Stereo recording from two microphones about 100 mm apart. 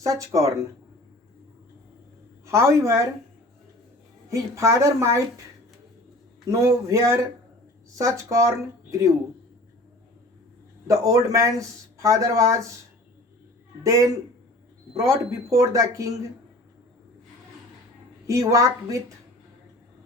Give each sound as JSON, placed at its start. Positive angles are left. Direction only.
{"t": 0.0, "sound": "speech", "side_deg": -30}
{"t": 2.5, "sound": "a woman's voice", "side_deg": -30}
{"t": 4.3, "sound": "a woman's voice", "side_deg": -30}
{"t": 6.5, "sound": "speech", "side_deg": -30}
{"t": 10.8, "sound": "speech", "side_deg": -35}
{"t": 13.8, "sound": "speech", "side_deg": -35}
{"t": 18.3, "sound": "speech", "side_deg": -30}